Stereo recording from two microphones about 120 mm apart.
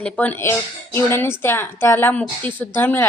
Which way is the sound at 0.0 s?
15° left (ahead or behind).